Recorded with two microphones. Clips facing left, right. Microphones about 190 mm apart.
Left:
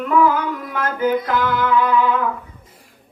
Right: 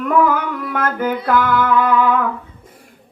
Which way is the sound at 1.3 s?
50° right (ahead or behind).